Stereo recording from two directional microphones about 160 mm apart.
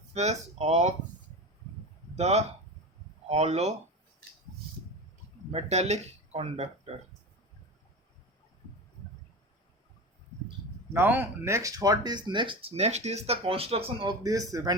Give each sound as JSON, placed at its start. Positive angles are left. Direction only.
{"t": 0.1, "sound": "speech", "side_deg": -40}
{"t": 2.1, "sound": "speech", "side_deg": -45}
{"t": 5.5, "sound": "speech", "side_deg": -40}
{"t": 10.9, "sound": "speech", "side_deg": -10}